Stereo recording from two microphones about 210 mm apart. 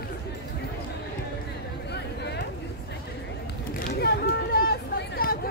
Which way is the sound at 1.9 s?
55° left (ahead or behind).